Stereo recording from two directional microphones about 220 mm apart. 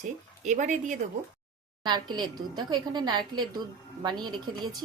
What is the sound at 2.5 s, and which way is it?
A woman's voice, 20° right (ahead or behind).